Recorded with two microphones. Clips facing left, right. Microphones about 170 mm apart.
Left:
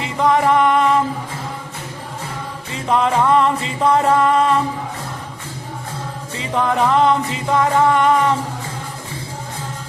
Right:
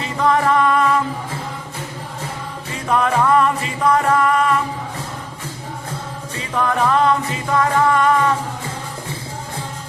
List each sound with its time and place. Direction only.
0.0 s music: 20° left (ahead or behind)
2.9 s music: 20° left (ahead or behind)
6.3 s music: 20° left (ahead or behind)